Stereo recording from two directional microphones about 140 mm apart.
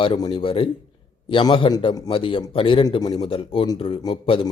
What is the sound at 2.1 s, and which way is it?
A man's voice, 40° left (ahead or behind).